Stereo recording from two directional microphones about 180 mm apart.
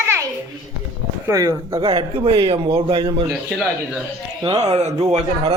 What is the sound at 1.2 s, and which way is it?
Speech, 15° right (ahead or behind).